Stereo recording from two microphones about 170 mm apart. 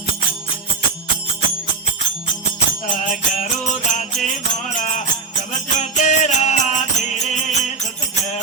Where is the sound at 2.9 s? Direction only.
45° left (ahead or behind).